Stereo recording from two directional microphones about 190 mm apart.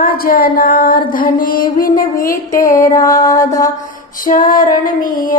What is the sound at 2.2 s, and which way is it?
Music, 15° left (ahead or behind).